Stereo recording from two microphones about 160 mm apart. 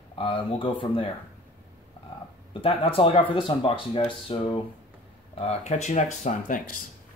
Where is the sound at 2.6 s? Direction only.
35° left (ahead or behind); by 6.7 s 55° left (ahead or behind).